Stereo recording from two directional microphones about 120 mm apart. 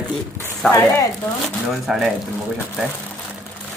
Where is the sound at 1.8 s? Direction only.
Centre (ahead or behind).